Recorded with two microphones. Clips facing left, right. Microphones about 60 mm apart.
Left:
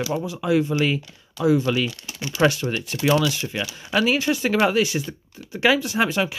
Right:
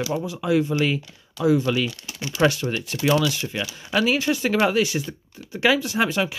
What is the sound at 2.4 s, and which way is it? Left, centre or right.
Speech, left.